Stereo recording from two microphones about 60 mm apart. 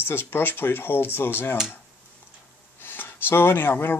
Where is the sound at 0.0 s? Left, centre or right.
Left.